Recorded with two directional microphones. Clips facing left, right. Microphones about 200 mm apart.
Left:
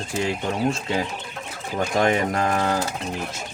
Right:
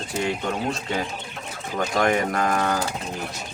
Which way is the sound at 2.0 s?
25° left (ahead or behind).